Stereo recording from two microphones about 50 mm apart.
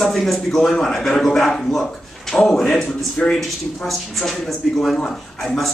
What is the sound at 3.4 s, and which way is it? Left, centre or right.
Speech, centre.